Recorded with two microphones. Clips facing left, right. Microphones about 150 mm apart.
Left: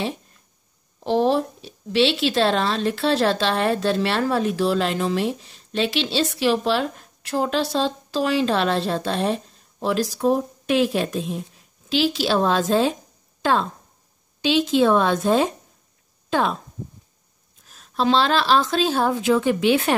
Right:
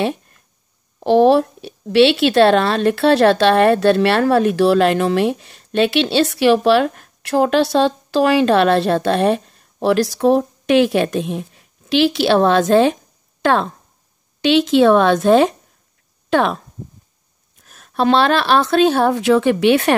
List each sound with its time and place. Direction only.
0.0 s a sound: 65° right (ahead or behind)
0.9 s a woman's voice: 65° right (ahead or behind)
17.6 s a woman's voice: 60° right (ahead or behind)